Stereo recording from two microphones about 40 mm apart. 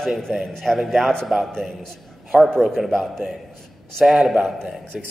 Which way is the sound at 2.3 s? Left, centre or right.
Centre.